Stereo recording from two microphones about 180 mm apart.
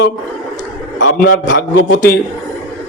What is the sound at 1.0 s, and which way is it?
Speech, 90° left.